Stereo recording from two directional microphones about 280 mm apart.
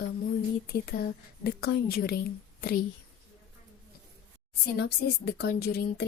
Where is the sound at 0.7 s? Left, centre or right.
Left.